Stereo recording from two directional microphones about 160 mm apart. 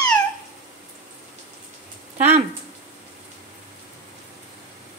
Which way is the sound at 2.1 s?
45° right (ahead or behind).